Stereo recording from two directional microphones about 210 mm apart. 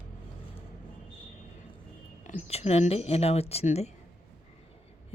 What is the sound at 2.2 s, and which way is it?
Speech, 30° left (ahead or behind).